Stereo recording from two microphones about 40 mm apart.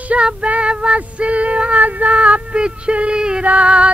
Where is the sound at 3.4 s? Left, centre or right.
Right.